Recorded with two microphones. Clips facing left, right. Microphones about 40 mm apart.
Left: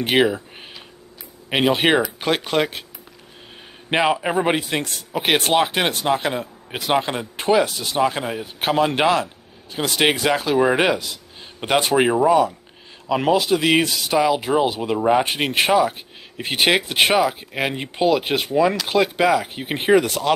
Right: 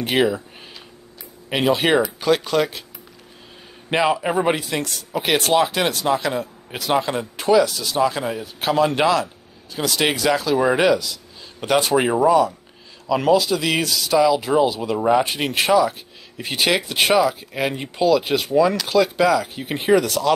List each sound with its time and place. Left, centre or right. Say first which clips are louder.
0.0 s speech: left 1 dB; left
1.5 s speech: even; left
3.9 s speech: even; left
4.2 s speech: even; centre
4.5 s speech: even; left